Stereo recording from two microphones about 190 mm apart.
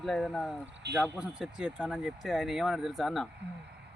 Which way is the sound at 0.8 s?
60° right (ahead or behind).